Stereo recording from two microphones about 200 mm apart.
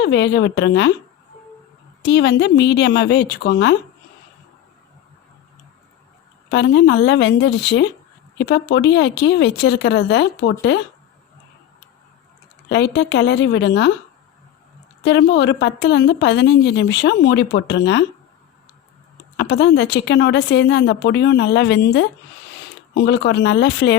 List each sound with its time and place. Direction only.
0.0 s a woman's voice: 60° left (ahead or behind)
2.0 s a woman's voice: 60° left (ahead or behind)
6.5 s a woman's voice: 60° left (ahead or behind)
12.6 s a woman's voice: 60° left (ahead or behind)
15.0 s a woman's voice: 60° left (ahead or behind)
19.4 s a woman's voice: 55° left (ahead or behind)